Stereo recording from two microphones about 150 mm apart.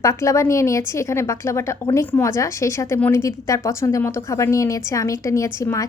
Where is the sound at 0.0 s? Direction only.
20° left (ahead or behind).